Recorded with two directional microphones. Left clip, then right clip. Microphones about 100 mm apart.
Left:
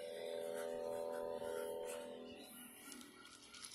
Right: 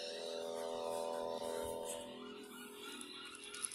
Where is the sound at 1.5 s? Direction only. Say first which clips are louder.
Right 2 dB; 40° right (ahead or behind).